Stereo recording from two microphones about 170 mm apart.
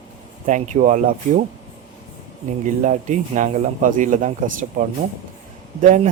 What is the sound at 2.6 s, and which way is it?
Speech, 45° right (ahead or behind).